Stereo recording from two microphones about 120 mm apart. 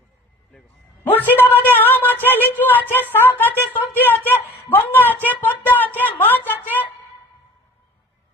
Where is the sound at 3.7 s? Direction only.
15° left (ahead or behind).